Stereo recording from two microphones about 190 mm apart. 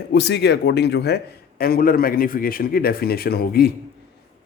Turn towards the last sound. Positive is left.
turn(degrees=55)  # may be behind; listen again after turning